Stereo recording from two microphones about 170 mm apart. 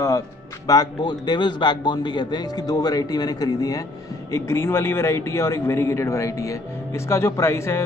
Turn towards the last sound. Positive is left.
turn(degrees=15)  # may be behind; listen again after turning